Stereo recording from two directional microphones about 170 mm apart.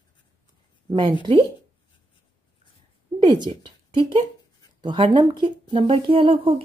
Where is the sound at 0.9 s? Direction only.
25° right (ahead or behind).